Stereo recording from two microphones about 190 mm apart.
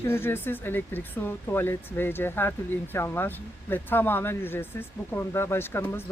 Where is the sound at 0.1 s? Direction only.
10° left (ahead or behind).